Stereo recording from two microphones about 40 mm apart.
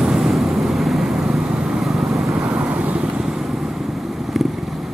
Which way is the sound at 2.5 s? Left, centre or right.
Right.